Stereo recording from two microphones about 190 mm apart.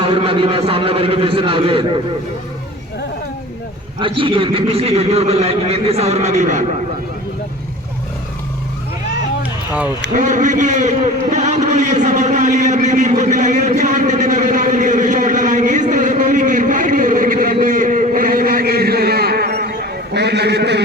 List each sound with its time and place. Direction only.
0.0 s a man's voice: 30° right (ahead or behind)
4.2 s a man's voice: 25° right (ahead or behind)
9.4 s run: 10° right (ahead or behind)
10.2 s a man's voice: 40° right (ahead or behind); by 20.8 s 60° right (ahead or behind)